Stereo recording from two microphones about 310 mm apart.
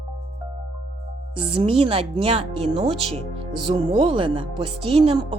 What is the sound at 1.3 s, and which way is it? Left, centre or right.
Speech, centre.